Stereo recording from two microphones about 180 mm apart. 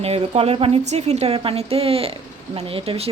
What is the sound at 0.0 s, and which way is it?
A woman's voice, 35° right (ahead or behind).